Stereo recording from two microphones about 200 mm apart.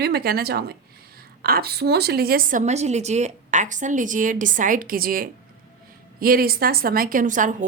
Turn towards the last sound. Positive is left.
turn(degrees=-40)  # may be behind; listen again after turning